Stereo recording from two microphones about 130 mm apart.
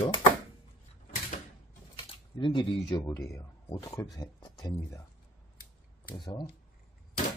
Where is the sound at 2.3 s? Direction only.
35° left (ahead or behind).